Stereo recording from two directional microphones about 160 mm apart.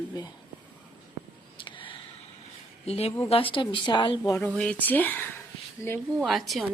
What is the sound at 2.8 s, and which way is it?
A woman's voice, 40° left (ahead or behind).